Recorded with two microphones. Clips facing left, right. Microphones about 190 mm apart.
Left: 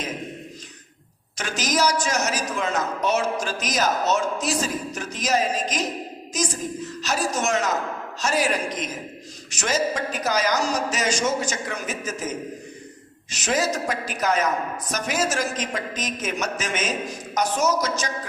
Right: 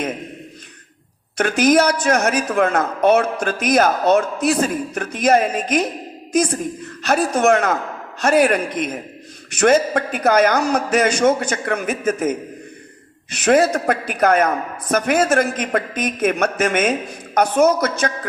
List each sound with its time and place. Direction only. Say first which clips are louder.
1.4 s a man's voice: right 9 dB; 60° right (ahead or behind)